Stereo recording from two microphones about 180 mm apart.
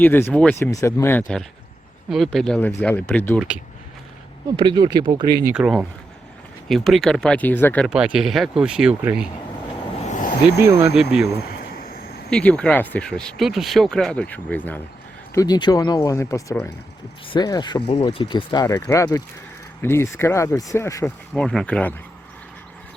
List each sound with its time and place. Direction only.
0.0 s speech: 10° left (ahead or behind)
2.0 s speech: centre (ahead or behind)
3.3 s speech: 5° right (ahead or behind)
4.5 s speech: 25° right (ahead or behind)
5.5 s speech: 5° right (ahead or behind); by 7.9 s 10° left (ahead or behind)
7.9 s speech: 5° right (ahead or behind)
10.1 s a sound: 45° left (ahead or behind)
10.6 s speech: 15° right (ahead or behind)
10.9 s speech: 5° right (ahead or behind)
11.6 s vehicle: 55° left (ahead or behind)
12.3 s speech: 5° left (ahead or behind)
15.4 s speech: 25° left (ahead or behind)
18.8 s speech: 10° left (ahead or behind)